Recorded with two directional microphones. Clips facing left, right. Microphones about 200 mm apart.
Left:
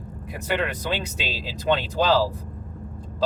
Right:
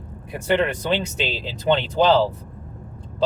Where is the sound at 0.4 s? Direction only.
25° right (ahead or behind).